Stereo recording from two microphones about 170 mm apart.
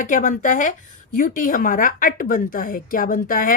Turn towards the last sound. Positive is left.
turn(degrees=55)  # may be behind; listen again after turning